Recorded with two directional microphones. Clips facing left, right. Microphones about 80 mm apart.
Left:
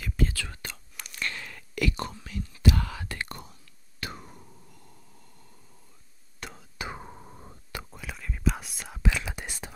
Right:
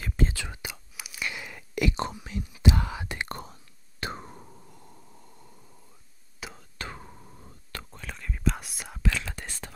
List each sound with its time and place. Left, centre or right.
0.0 s whispering: right
3.3 s whispering: right
6.4 s a sound: centre
6.8 s whispering: centre
7.7 s whispering: centre
9.0 s whispering: centre